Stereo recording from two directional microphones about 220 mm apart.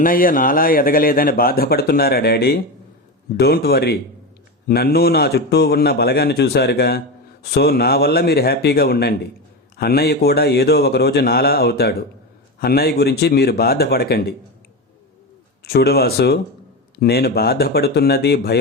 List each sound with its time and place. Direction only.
0.0 s a man's voice: 40° left (ahead or behind)
15.7 s a man's voice: 45° left (ahead or behind)